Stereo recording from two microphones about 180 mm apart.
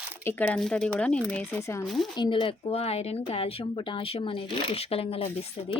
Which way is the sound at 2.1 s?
25° left (ahead or behind).